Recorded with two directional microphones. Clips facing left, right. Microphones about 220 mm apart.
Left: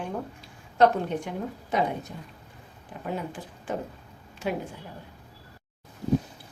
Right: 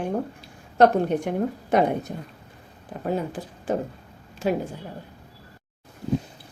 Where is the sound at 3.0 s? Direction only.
40° right (ahead or behind).